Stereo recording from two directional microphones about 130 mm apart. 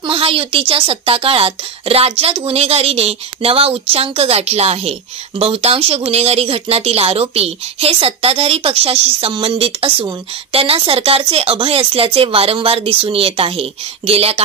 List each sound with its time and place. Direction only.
0.0 s a woman's voice: 45° right (ahead or behind)